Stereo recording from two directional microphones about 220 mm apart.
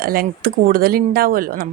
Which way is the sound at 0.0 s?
40° right (ahead or behind).